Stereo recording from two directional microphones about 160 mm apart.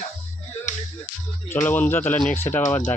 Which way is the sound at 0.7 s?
50° left (ahead or behind).